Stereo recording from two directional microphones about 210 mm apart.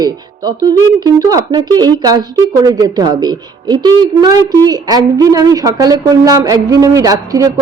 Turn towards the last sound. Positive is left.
turn(degrees=-15)  # may be behind; listen again after turning